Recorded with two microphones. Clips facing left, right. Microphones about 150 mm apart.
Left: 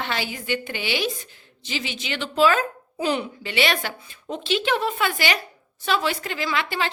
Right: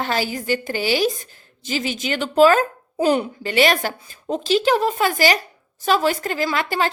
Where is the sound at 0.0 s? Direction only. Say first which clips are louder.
Right 6 dB; 40° right (ahead or behind).